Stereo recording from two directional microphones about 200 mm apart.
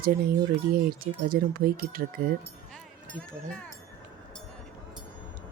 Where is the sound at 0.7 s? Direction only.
45° right (ahead or behind).